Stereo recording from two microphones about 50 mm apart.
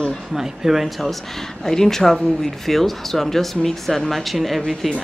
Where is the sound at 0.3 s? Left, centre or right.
Centre.